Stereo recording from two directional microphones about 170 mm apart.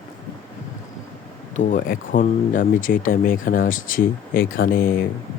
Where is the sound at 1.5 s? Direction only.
50° left (ahead or behind).